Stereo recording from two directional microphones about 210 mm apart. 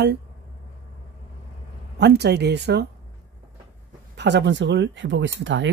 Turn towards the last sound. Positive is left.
turn(degrees=-60)  # may be behind; listen again after turning